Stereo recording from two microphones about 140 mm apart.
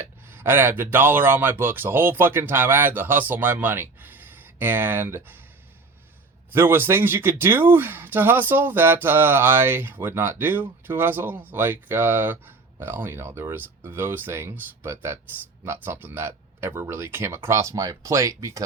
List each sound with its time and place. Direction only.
0.3 s speech: 15° right (ahead or behind)
6.5 s speech: 15° right (ahead or behind)